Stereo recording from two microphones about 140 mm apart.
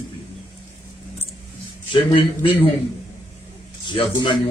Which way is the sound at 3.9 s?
35° left (ahead or behind).